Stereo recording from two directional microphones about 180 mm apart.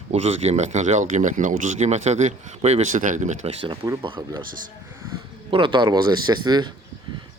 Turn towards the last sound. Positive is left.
turn(degrees=-25)  # may be behind; listen again after turning